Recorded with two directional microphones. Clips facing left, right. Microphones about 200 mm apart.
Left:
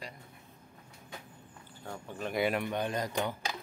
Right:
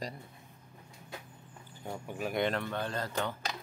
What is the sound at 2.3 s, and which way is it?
Speech, 10° left (ahead or behind).